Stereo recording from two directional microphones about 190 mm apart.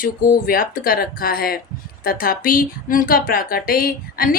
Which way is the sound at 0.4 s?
50° left (ahead or behind).